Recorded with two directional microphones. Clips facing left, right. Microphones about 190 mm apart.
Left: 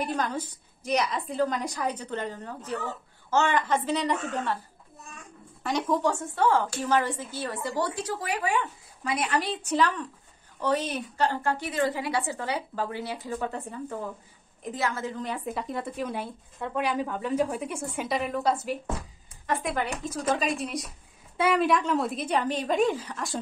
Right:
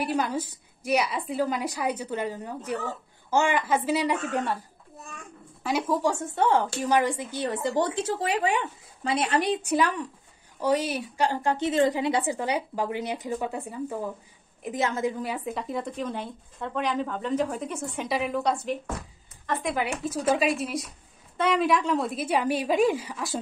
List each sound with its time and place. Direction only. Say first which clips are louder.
0.0 s a woman's voice: right 2 dB; 10° right (ahead or behind)
6.3 s a woman's voice: right 1 dB; 20° right (ahead or behind); by 23.4 s centre (ahead or behind)